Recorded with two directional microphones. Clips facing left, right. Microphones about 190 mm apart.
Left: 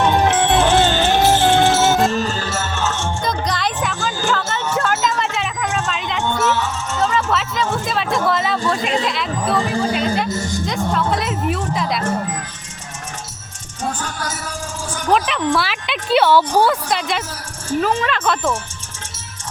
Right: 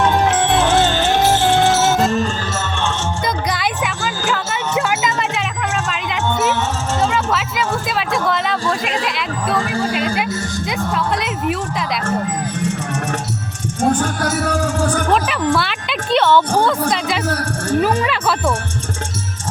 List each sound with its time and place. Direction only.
0.1 s music: centre (ahead or behind)
2.0 s music: centre (ahead or behind)
3.2 s music: 10° right (ahead or behind)
6.4 s music: 15° right (ahead or behind)
7.1 s a sound: 5° right (ahead or behind)
9.8 s music: 5° right (ahead or behind)
13.8 s speech: 50° right (ahead or behind)
15.1 s speech: centre (ahead or behind)
17.2 s a woman's voice: 65° right (ahead or behind)
18.0 s speech: 10° right (ahead or behind)